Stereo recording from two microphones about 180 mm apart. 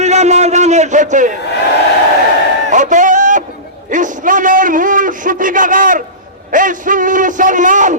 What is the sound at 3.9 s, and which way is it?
A man's voice, 45° right (ahead or behind).